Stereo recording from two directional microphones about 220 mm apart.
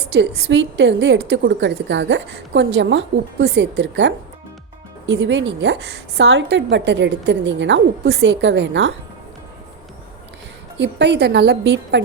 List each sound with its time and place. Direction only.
0.1 s a woman's voice: 55° right (ahead or behind)
10.8 s a woman's voice: 50° right (ahead or behind)